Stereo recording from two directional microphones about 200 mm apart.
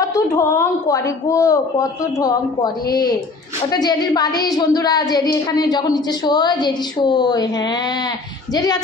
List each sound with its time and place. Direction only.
0.1 s a woman's voice: 15° left (ahead or behind)